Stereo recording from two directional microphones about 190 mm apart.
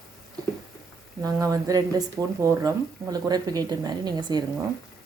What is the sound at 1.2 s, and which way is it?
Speech, 20° right (ahead or behind).